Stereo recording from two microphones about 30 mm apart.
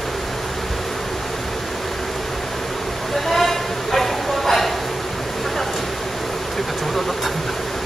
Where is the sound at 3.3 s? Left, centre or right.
Centre.